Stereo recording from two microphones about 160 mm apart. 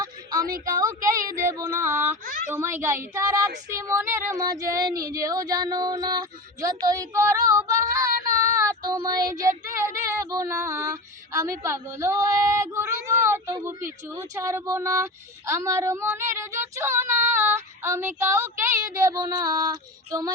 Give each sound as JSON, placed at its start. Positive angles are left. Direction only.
{"t": 0.0, "sound": "a sound", "side_deg": -25}
{"t": 0.4, "sound": "a woman's voice", "side_deg": -60}
{"t": 0.7, "sound": "speech", "side_deg": -20}
{"t": 1.5, "sound": "child singing", "side_deg": -15}
{"t": 3.7, "sound": "speech", "side_deg": -20}
{"t": 6.8, "sound": "child singing", "side_deg": -20}